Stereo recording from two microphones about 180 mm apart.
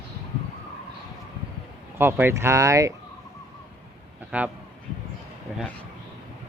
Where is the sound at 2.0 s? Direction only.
10° right (ahead or behind).